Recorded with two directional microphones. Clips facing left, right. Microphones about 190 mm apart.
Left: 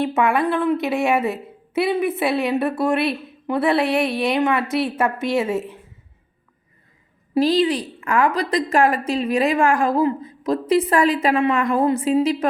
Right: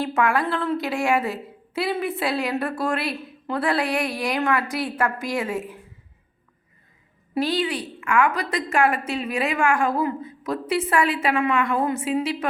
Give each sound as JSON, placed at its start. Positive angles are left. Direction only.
{"t": 0.0, "sound": "a woman's voice", "side_deg": 20}
{"t": 7.3, "sound": "a woman's voice", "side_deg": 35}